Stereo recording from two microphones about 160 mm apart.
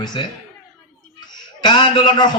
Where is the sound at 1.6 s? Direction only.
30° left (ahead or behind).